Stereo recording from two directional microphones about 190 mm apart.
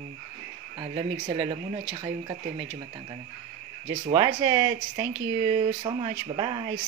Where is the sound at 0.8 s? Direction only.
25° right (ahead or behind).